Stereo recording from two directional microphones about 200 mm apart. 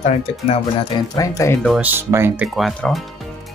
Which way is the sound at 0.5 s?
20° left (ahead or behind).